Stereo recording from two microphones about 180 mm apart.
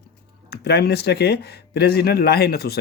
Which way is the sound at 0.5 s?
60° left (ahead or behind).